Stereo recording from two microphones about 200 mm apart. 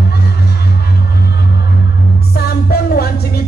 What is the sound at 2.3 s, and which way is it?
Music, 50° left (ahead or behind).